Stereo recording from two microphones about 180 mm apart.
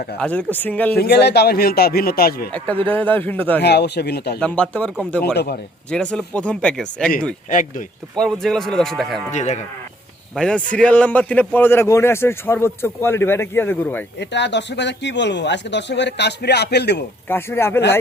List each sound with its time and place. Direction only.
0.2 s a man's voice: 10° left (ahead or behind)
0.9 s a man's voice: 65° left (ahead or behind)
2.5 s a man's voice: 10° left (ahead or behind)
3.6 s speech: 65° left (ahead or behind)
4.4 s speech: 5° left (ahead or behind)
5.2 s a man's voice: 65° left (ahead or behind)
5.9 s speech: 5° left (ahead or behind)
7.5 s speech: 45° left (ahead or behind)
8.1 s speech: 5° left (ahead or behind)
9.3 s speech: 40° left (ahead or behind)
10.3 s a man's voice: 5° left (ahead or behind)
14.2 s speech: 75° left (ahead or behind)
17.2 s a man's voice: 10° left (ahead or behind)